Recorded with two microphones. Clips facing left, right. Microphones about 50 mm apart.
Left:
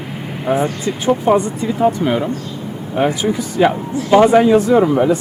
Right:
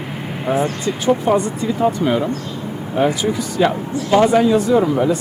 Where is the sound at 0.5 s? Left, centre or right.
Left.